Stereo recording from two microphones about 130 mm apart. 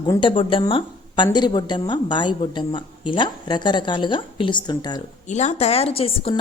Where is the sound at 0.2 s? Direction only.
40° left (ahead or behind).